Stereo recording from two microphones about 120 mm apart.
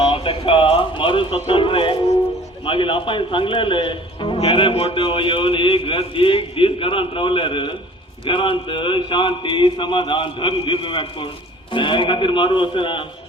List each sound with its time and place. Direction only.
0.1 s a man's voice: 50° left (ahead or behind)